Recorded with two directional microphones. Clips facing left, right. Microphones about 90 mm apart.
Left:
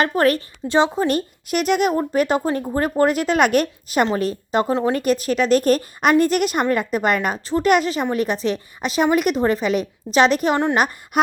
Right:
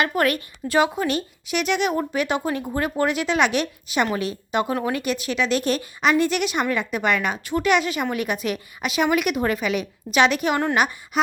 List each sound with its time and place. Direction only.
0.0 s a woman's voice: 35° left (ahead or behind)
1.0 s a woman's voice: 45° left (ahead or behind)